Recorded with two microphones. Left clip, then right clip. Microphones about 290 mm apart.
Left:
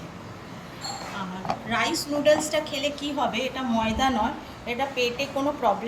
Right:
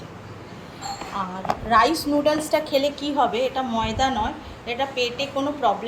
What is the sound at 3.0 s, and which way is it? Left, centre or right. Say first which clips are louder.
A woman's voice: right 5 dB; centre.